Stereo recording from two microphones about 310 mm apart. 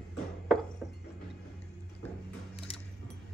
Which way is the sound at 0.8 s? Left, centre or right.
Centre.